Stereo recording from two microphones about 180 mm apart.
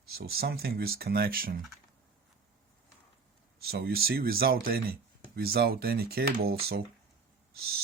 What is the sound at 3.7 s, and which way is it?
Speech, 60° right (ahead or behind).